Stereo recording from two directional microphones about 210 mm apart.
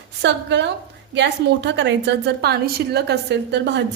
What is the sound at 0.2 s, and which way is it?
A woman's voice, 55° right (ahead or behind).